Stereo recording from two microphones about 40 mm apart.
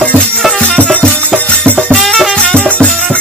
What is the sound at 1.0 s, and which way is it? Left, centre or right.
Music, left.